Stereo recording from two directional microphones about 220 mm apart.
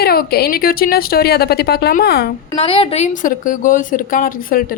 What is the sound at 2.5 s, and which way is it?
A woman's voice, 25° left (ahead or behind).